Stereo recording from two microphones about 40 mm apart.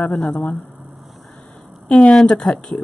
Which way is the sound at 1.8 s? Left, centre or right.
Left.